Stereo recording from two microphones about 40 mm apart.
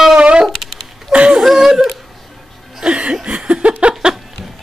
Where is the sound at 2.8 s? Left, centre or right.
Right.